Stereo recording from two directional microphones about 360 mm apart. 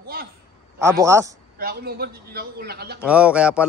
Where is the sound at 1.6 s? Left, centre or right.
Right.